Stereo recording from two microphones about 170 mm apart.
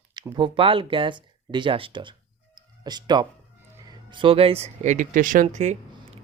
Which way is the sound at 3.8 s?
25° right (ahead or behind).